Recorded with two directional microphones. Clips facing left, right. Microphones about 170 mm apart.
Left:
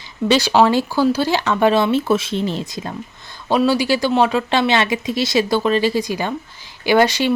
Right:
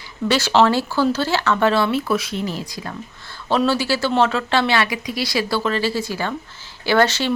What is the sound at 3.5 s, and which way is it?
Speech, 15° left (ahead or behind).